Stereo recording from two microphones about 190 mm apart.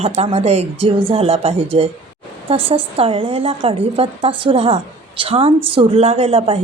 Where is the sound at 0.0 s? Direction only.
35° right (ahead or behind).